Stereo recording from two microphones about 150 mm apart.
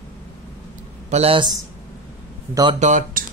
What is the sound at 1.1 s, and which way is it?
Speech, 40° right (ahead or behind).